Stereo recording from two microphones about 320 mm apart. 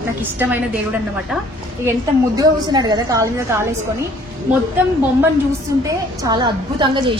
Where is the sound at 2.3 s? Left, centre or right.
Centre.